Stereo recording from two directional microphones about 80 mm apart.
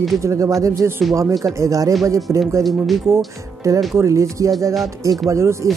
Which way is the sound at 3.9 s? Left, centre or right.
Right.